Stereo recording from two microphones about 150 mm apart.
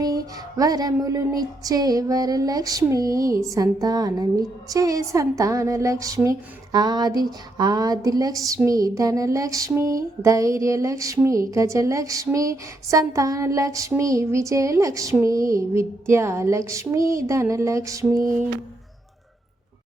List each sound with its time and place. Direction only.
0.0 s a woman's voice: 25° right (ahead or behind)